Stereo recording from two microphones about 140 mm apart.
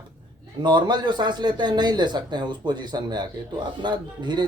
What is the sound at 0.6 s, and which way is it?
Speech, 30° right (ahead or behind).